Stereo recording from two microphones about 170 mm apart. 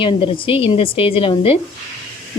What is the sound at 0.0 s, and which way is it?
Speech, 30° left (ahead or behind).